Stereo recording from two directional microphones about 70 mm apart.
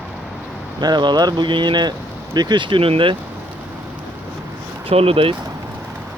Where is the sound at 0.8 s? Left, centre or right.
Right.